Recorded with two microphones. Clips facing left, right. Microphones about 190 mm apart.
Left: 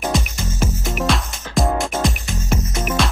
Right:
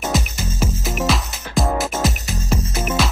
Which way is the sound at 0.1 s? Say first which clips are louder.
Even; 5° right (ahead or behind).